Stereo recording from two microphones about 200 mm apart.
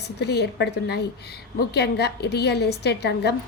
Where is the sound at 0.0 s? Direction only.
55° left (ahead or behind).